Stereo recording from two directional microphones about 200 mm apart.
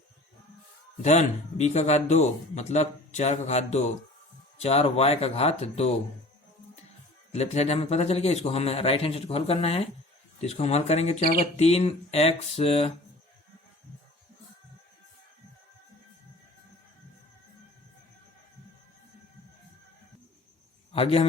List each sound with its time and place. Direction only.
1.0 s a man's voice: 35° left (ahead or behind)
7.3 s a man's voice: 30° left (ahead or behind)
20.9 s a man's voice: 30° left (ahead or behind)